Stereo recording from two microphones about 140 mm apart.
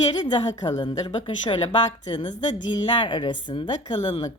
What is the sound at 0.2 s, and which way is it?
A woman's voice, 30° left (ahead or behind).